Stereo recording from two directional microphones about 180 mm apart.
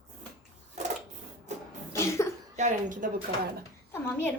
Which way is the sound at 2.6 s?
45° right (ahead or behind).